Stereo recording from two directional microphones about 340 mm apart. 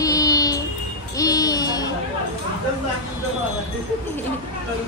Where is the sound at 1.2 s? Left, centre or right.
Centre.